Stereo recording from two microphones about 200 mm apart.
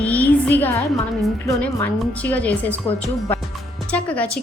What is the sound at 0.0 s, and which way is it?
Music, 10° left (ahead or behind).